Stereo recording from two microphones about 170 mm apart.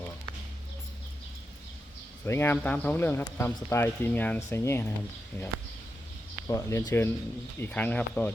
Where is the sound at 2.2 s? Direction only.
15° left (ahead or behind).